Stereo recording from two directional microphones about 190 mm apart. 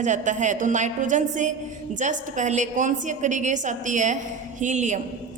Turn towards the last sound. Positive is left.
turn(degrees=-40)  # may be behind; listen again after turning